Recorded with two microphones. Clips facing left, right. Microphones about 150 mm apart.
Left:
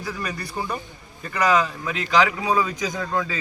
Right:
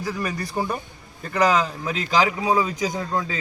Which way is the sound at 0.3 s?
40° right (ahead or behind).